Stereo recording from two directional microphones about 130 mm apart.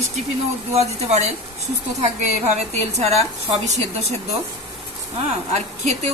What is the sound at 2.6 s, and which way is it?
A man's voice, 60° right (ahead or behind).